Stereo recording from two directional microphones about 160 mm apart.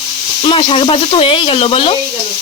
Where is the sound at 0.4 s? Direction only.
35° left (ahead or behind).